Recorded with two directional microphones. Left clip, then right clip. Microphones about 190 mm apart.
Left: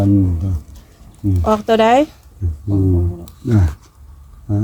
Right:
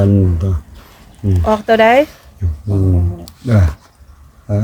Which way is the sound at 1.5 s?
15° left (ahead or behind).